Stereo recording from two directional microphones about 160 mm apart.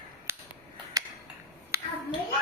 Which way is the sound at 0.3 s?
15° right (ahead or behind).